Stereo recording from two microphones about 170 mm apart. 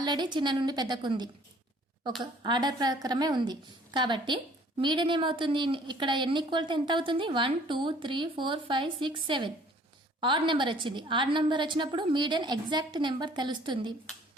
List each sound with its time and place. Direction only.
0.0 s a woman's voice: 25° right (ahead or behind)
2.4 s a woman's voice: 25° right (ahead or behind)